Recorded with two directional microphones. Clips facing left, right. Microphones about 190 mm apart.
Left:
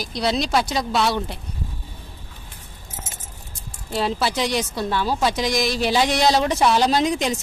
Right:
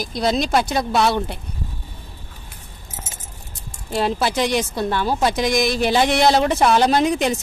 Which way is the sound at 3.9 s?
50° right (ahead or behind).